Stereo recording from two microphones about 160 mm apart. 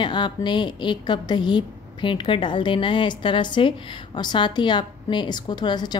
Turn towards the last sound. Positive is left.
turn(degrees=25)  # may be behind; listen again after turning